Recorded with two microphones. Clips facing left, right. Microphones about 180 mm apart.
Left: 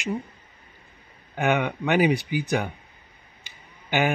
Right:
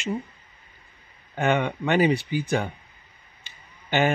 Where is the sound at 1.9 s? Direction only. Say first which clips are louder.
Even; 15° left (ahead or behind).